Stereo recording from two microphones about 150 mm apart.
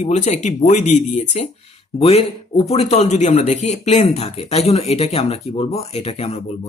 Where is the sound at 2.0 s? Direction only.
40° left (ahead or behind).